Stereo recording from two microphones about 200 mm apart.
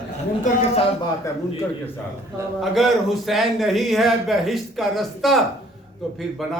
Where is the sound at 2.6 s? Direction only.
Centre (ahead or behind).